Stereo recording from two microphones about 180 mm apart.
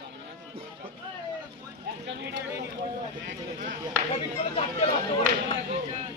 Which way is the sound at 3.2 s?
45° right (ahead or behind).